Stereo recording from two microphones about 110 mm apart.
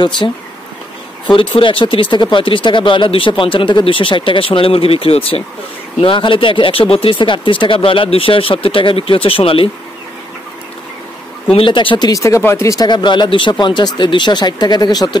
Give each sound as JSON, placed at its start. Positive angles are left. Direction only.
{"t": 0.2, "sound": "speech", "side_deg": 40}
{"t": 1.6, "sound": "speech", "side_deg": 50}
{"t": 11.5, "sound": "speech", "side_deg": 50}
{"t": 12.1, "sound": "speech", "side_deg": 30}